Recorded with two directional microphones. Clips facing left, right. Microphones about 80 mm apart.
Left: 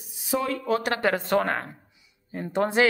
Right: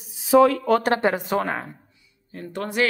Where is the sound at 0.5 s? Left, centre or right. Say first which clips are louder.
Right 5 dB; right.